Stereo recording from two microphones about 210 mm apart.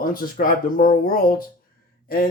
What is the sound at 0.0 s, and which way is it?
Speech, 40° left (ahead or behind).